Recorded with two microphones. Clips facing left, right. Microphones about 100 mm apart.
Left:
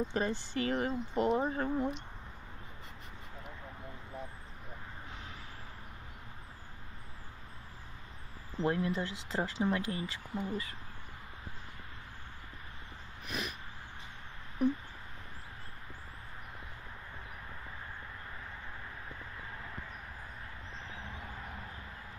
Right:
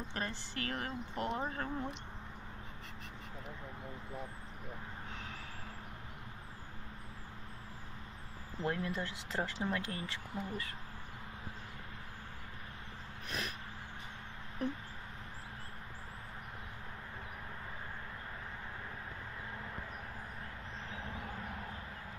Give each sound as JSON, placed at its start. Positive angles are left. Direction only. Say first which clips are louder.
{"t": 0.1, "sound": "speech", "louder": "left 7 dB", "side_deg": 20}
{"t": 8.5, "sound": "speech", "louder": "left 5 dB", "side_deg": 25}
{"t": 13.3, "sound": "vehicle", "louder": "left 2 dB", "side_deg": 5}